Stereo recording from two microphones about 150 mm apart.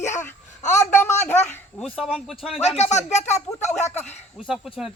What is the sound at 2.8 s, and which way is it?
Speech, 50° left (ahead or behind).